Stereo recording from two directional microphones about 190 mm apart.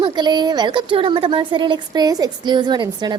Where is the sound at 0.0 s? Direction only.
20° right (ahead or behind).